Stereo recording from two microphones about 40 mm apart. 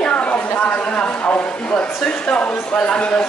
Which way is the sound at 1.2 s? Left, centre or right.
Left.